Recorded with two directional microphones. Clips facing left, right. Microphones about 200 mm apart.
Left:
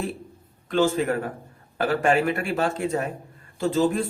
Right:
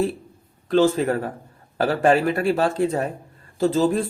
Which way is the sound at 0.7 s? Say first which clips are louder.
Right 4 dB; 35° right (ahead or behind).